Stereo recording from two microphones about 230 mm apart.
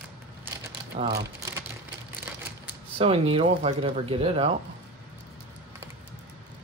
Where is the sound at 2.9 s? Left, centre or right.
Right.